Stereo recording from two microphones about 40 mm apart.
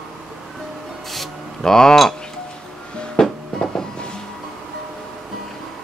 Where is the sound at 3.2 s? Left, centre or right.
Centre.